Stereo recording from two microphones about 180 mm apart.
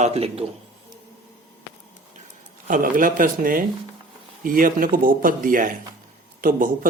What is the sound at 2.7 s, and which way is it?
Speech, 50° right (ahead or behind).